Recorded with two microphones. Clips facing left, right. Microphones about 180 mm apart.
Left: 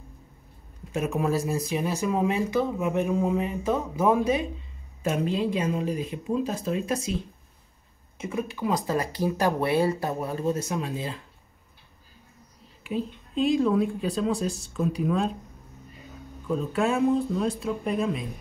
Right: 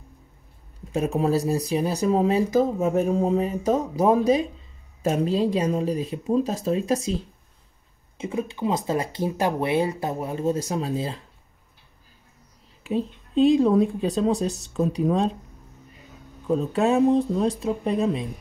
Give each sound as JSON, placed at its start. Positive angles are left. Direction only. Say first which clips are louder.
{"t": 0.9, "sound": "speech", "louder": "right 3 dB", "side_deg": -30}
{"t": 12.8, "sound": "speech", "louder": "right 4 dB", "side_deg": -35}
{"t": 16.4, "sound": "speech", "louder": "right 4 dB", "side_deg": -35}